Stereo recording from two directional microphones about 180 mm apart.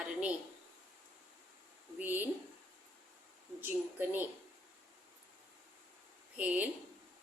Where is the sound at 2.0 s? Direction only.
10° right (ahead or behind).